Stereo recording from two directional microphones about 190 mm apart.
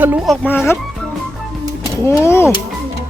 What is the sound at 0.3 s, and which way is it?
Speech, 10° left (ahead or behind).